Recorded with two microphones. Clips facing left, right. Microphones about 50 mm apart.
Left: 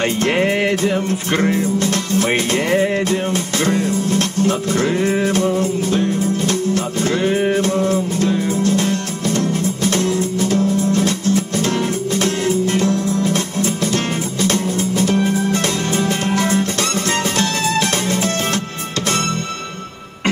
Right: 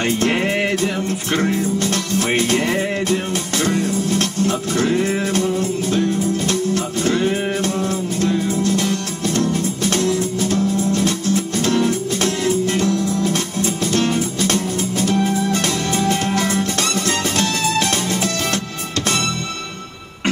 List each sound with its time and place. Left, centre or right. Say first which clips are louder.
0.0 s music: left 2 dB; left